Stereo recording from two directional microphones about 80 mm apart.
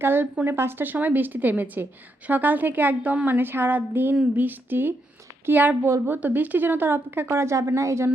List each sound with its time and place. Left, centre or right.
0.0 s a woman's voice: right